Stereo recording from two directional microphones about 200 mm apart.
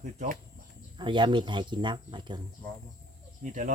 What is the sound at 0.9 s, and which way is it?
Speech, 25° right (ahead or behind).